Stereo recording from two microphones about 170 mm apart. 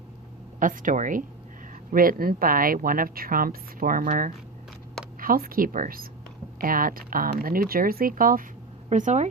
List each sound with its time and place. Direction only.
0.6 s speech: 50° right (ahead or behind)